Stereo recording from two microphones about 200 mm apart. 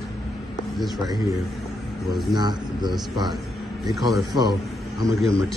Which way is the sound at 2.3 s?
20° right (ahead or behind).